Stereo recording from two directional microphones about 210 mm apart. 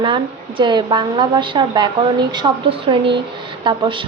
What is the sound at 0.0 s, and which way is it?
A woman's voice, 25° right (ahead or behind).